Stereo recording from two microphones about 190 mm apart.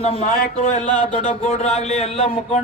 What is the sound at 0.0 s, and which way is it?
Speech, 30° left (ahead or behind).